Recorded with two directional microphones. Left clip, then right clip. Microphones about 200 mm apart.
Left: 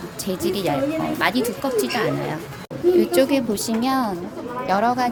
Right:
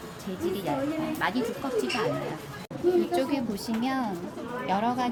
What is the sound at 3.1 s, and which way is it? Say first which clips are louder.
Speech: left 9 dB; 40° left (ahead or behind).